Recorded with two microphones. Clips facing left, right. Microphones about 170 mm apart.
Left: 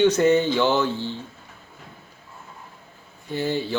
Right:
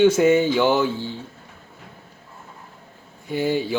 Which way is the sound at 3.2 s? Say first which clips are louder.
Right 3 dB; 10° right (ahead or behind).